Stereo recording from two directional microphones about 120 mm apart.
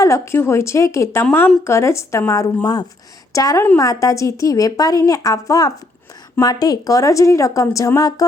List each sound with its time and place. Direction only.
0.0 s a woman's voice: 20° left (ahead or behind)